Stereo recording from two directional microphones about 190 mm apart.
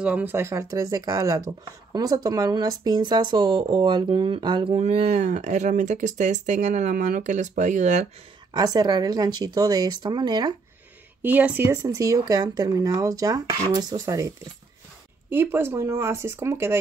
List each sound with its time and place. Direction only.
0.0 s speech: 10° right (ahead or behind); by 4.7 s 25° right (ahead or behind)
4.7 s speech: 35° right (ahead or behind)
8.5 s speech: 20° right (ahead or behind)
11.2 s speech: 10° right (ahead or behind)